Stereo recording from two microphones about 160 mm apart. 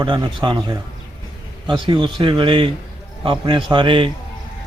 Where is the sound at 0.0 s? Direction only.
30° right (ahead or behind).